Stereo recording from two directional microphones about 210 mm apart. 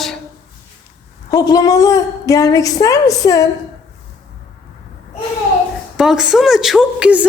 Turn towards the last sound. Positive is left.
turn(degrees=-5)  # may be behind; listen again after turning